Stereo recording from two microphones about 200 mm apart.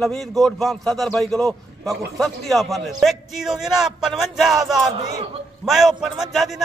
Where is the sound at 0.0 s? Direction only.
Centre (ahead or behind).